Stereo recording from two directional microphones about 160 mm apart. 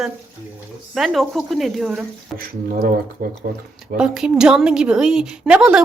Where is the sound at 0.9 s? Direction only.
Centre (ahead or behind).